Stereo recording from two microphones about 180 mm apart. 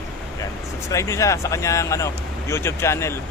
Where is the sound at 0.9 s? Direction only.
15° left (ahead or behind).